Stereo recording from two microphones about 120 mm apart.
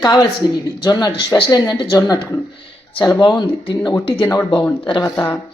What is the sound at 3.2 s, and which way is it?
Speech, 40° left (ahead or behind).